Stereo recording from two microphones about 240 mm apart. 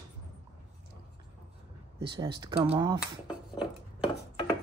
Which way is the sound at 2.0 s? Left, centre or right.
Centre.